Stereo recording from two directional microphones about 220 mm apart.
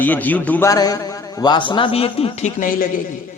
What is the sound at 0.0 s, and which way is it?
A man's voice, 5° left (ahead or behind).